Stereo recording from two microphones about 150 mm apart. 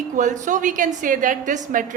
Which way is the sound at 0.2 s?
55° right (ahead or behind).